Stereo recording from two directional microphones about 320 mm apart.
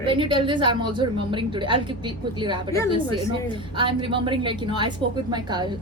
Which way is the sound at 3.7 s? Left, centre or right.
Centre.